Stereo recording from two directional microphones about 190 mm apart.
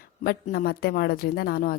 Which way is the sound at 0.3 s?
55° left (ahead or behind).